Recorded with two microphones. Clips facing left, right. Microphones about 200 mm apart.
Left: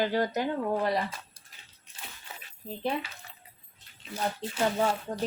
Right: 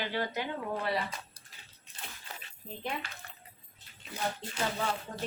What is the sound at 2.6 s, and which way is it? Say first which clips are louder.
Speech: left 5 dB; 35° left (ahead or behind).